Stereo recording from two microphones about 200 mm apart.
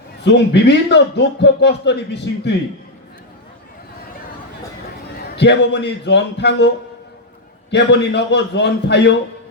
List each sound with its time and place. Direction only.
0.3 s speech: 60° left (ahead or behind)
5.4 s speech: 60° left (ahead or behind)
7.7 s speech: 60° left (ahead or behind)